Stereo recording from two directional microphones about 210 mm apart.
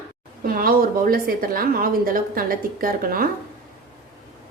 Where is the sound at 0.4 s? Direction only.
45° right (ahead or behind).